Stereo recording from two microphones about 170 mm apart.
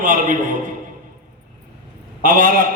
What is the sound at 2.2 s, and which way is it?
Speech, 55° right (ahead or behind).